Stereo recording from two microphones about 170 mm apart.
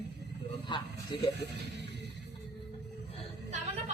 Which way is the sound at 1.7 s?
90° right.